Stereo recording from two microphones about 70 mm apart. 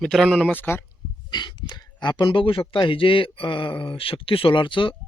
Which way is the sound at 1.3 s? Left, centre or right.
Left.